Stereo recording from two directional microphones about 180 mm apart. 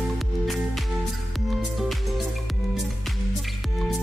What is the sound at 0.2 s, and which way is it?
Music, centre (ahead or behind).